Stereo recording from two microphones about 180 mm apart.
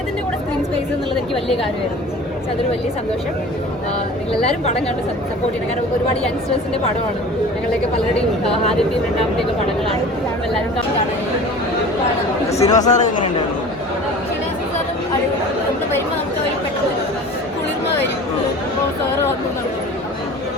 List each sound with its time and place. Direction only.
12.5 s speech: 35° left (ahead or behind)